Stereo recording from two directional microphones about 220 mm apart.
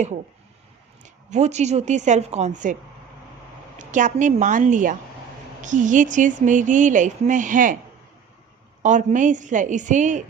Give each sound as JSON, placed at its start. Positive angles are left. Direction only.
{"t": 1.0, "sound": "speech", "side_deg": -30}
{"t": 3.8, "sound": "speech", "side_deg": -35}
{"t": 8.8, "sound": "speech", "side_deg": -35}